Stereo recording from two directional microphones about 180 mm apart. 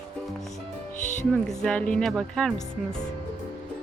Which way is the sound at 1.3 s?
Centre (ahead or behind).